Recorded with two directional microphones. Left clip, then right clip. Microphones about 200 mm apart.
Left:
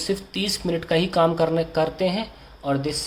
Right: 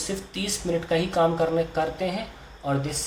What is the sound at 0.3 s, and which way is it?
Speech, 40° left (ahead or behind).